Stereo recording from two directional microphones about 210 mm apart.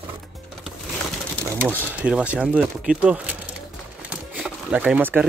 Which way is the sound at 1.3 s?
5° left (ahead or behind).